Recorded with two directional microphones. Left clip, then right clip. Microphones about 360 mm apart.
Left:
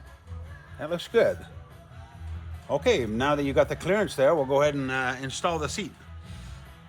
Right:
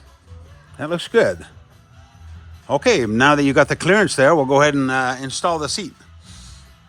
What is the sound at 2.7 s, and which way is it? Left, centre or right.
Speech, right.